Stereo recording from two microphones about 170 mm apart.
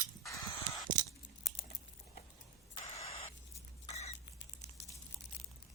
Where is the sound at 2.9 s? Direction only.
40° left (ahead or behind).